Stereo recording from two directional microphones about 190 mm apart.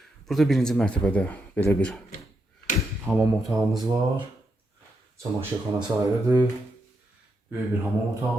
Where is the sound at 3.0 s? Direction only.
10° right (ahead or behind).